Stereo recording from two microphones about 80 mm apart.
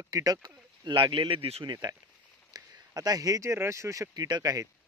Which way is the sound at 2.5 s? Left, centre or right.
Right.